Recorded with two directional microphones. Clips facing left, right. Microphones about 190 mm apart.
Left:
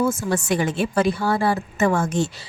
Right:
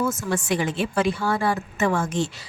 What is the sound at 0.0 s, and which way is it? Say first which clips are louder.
A woman's voice: left 3 dB; 30° left (ahead or behind).